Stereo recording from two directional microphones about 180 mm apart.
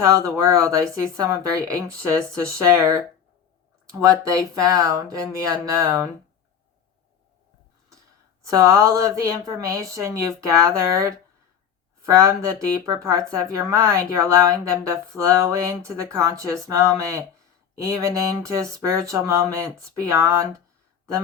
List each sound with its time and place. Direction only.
0.0 s speech: 15° right (ahead or behind)
8.4 s speech: 15° right (ahead or behind)